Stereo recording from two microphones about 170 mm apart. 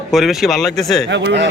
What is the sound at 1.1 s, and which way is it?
Speech, 90° right.